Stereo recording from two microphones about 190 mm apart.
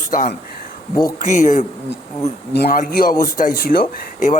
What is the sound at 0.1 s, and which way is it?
Speech, 45° left (ahead or behind).